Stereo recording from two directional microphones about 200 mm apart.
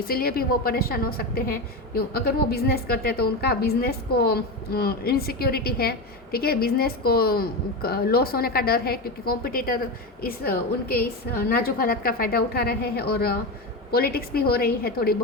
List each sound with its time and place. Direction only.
0.1 s a woman's voice: 50° left (ahead or behind)